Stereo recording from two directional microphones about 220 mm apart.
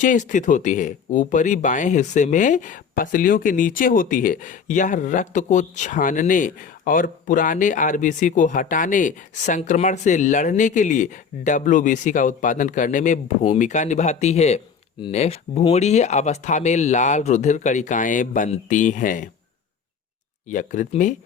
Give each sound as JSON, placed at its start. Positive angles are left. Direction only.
{"t": 0.0, "sound": "speech", "side_deg": 35}
{"t": 20.5, "sound": "speech", "side_deg": 35}